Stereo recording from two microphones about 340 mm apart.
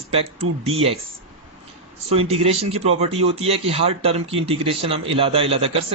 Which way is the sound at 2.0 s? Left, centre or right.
Centre.